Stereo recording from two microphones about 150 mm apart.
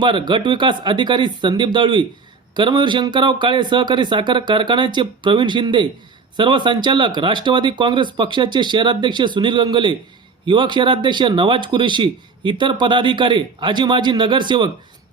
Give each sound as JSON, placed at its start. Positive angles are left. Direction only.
{"t": 0.0, "sound": "speech", "side_deg": -30}